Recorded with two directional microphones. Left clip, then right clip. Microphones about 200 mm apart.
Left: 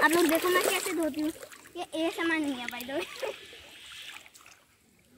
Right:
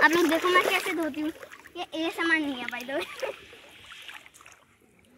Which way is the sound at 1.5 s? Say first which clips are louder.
Right 1 dB; 5° right (ahead or behind).